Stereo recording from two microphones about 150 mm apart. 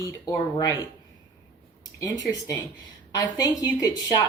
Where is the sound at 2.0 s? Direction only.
25° left (ahead or behind).